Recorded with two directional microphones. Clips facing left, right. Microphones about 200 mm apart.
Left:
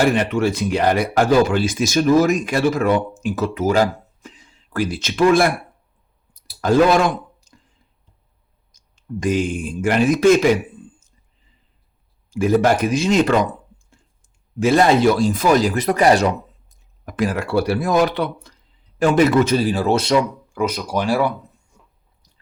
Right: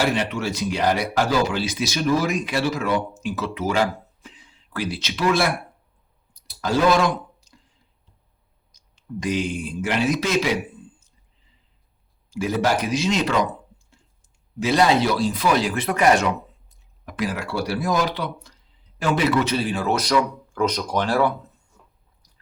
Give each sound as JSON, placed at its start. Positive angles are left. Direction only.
{"t": 0.0, "sound": "speech", "side_deg": 55}
{"t": 6.6, "sound": "speech", "side_deg": 50}
{"t": 8.7, "sound": "speech", "side_deg": 50}
{"t": 12.3, "sound": "speech", "side_deg": 50}
{"t": 14.6, "sound": "a man's voice", "side_deg": 50}
{"t": 20.5, "sound": "speech", "side_deg": 10}